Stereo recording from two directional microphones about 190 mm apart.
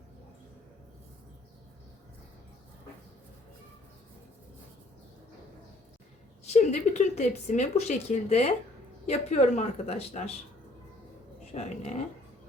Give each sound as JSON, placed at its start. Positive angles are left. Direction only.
{"t": 6.4, "sound": "speech", "side_deg": 35}
{"t": 11.5, "sound": "speech", "side_deg": 35}